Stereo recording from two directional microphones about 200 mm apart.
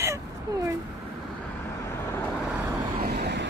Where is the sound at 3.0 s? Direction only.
55° right (ahead or behind).